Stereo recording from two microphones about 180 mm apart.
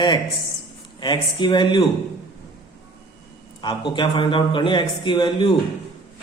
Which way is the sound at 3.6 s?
25° left (ahead or behind).